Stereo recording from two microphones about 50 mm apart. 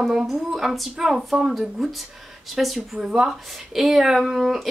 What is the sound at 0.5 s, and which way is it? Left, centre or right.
Speech, centre.